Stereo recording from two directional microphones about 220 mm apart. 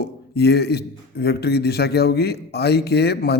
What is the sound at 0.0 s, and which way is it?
A man's voice, 45° left (ahead or behind).